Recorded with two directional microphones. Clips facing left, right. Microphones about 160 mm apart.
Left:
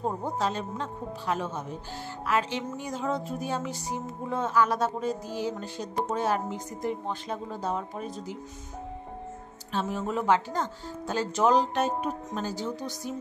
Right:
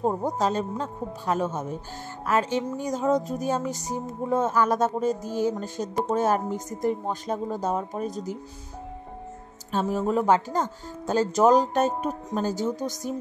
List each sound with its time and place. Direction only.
0.0 s speech: 40° right (ahead or behind)
9.7 s speech: 40° right (ahead or behind)